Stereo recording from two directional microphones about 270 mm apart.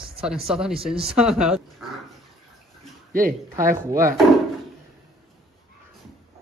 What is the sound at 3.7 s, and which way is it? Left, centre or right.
Speech, centre.